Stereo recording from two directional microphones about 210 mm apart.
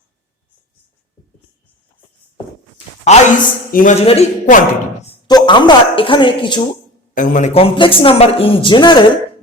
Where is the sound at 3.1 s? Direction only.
30° left (ahead or behind).